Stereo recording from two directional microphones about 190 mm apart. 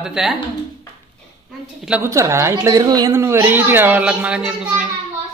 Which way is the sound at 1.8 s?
10° right (ahead or behind).